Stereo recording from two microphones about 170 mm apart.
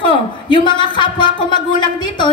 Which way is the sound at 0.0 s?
30° left (ahead or behind).